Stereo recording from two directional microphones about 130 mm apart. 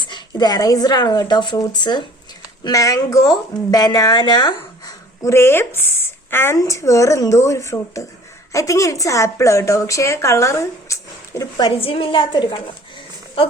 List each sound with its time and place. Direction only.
0.0 s a woman's voice: 35° left (ahead or behind)
11.8 s a woman's voice: 45° left (ahead or behind)